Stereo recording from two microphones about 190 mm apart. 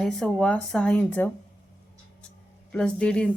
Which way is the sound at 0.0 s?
Centre (ahead or behind).